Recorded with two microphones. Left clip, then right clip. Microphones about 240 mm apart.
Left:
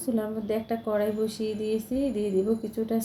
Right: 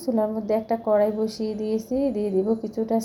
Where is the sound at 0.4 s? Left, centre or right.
Centre.